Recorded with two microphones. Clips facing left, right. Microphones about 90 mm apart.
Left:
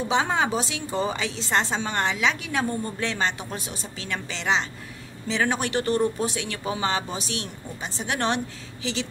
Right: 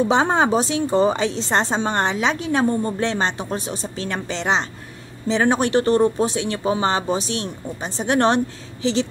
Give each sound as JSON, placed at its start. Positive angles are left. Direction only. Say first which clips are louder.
{"t": 0.1, "sound": "a woman's voice", "louder": "right 6 dB", "side_deg": -40}